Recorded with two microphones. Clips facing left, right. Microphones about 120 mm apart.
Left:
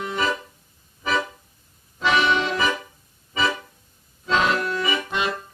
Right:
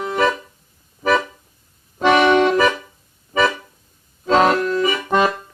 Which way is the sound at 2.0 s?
50° right (ahead or behind).